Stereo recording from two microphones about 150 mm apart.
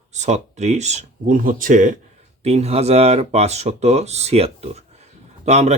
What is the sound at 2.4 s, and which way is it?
Speech, 45° right (ahead or behind).